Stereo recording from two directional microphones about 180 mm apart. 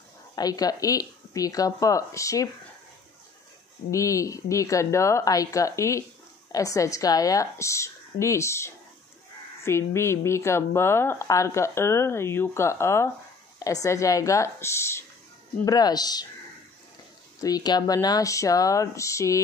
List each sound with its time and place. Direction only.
0.4 s speech: 20° left (ahead or behind)
3.9 s a woman's voice: 15° left (ahead or behind)
17.4 s speech: 20° left (ahead or behind)